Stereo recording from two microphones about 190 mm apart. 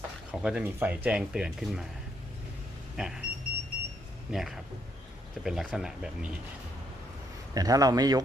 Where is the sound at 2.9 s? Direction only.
Centre (ahead or behind).